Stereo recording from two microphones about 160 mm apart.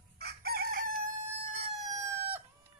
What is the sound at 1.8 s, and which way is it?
Chicken, 20° right (ahead or behind).